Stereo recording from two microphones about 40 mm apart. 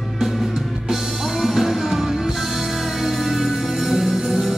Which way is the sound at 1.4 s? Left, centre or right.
Centre.